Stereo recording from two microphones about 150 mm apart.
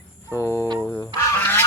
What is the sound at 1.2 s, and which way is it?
Goose, 15° left (ahead or behind).